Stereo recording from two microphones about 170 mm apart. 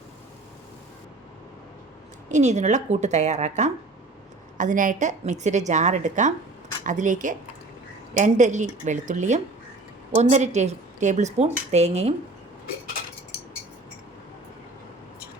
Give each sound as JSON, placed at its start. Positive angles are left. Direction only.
{"t": 2.3, "sound": "a woman's voice", "side_deg": -45}